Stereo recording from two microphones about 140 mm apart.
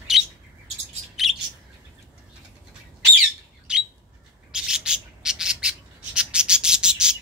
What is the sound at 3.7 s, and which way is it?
Bird, 5° right (ahead or behind).